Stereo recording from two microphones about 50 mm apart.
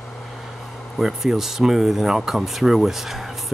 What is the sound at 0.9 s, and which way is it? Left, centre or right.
Speech, centre.